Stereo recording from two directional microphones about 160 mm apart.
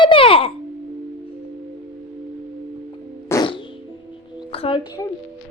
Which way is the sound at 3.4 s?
30° left (ahead or behind).